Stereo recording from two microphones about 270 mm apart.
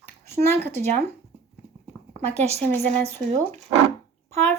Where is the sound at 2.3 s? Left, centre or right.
Right.